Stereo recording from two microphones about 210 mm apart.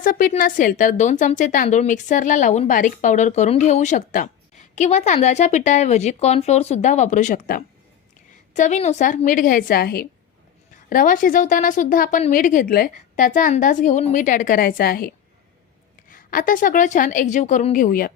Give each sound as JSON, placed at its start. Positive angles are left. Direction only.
{"t": 0.0, "sound": "a woman's voice", "side_deg": 40}